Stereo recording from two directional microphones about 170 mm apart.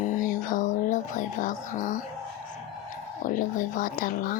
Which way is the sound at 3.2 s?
50° left (ahead or behind).